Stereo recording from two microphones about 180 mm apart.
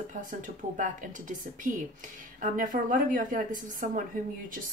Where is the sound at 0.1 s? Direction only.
45° right (ahead or behind).